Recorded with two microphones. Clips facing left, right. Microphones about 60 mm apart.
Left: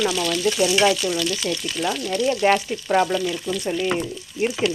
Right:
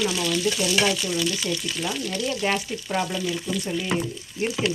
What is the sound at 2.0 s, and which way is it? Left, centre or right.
Speech, left.